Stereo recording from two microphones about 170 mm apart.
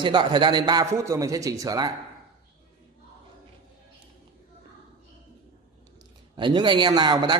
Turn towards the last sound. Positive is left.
turn(degrees=-25)  # may be behind; listen again after turning